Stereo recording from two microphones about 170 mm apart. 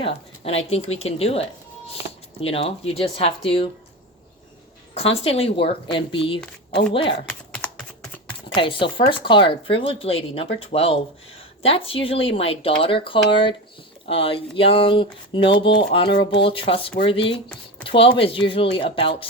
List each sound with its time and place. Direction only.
0.0 s speech: 35° left (ahead or behind)
5.2 s speech: 35° left (ahead or behind)
7.3 s typing: 5° left (ahead or behind)
8.4 s speech: 30° left (ahead or behind)